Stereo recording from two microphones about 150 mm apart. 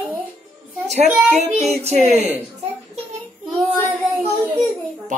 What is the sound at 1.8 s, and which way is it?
Speech, 45° right (ahead or behind).